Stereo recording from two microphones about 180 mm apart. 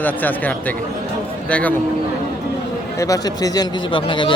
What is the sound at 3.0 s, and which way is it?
Speech, 20° left (ahead or behind).